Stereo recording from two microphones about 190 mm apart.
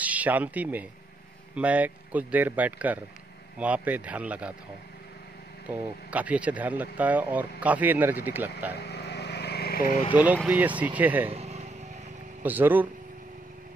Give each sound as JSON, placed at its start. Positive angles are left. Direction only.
{"t": 0.0, "sound": "speech", "side_deg": -5}
{"t": 5.7, "sound": "speech", "side_deg": -10}
{"t": 8.7, "sound": "vehicle", "side_deg": 60}
{"t": 10.1, "sound": "speech", "side_deg": -10}
{"t": 11.2, "sound": "vehicle", "side_deg": -35}
{"t": 12.4, "sound": "speech", "side_deg": -10}